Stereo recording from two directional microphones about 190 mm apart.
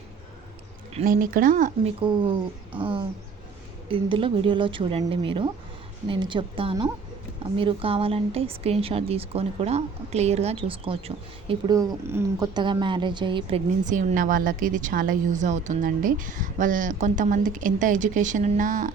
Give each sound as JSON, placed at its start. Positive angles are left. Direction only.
{"t": 1.0, "sound": "a woman's voice", "side_deg": -50}
{"t": 2.0, "sound": "speech", "side_deg": -30}
{"t": 2.7, "sound": "speech", "side_deg": -10}
{"t": 3.8, "sound": "speech", "side_deg": -30}
{"t": 11.8, "sound": "speech", "side_deg": -15}
{"t": 13.8, "sound": "a woman's voice", "side_deg": -40}